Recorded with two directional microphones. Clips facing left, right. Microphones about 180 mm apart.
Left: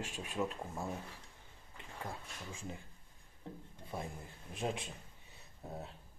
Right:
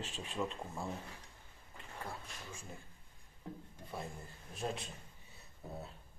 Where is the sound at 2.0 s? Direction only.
15° left (ahead or behind).